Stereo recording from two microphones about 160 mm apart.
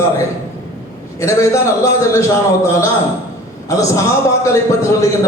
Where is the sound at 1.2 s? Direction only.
20° left (ahead or behind).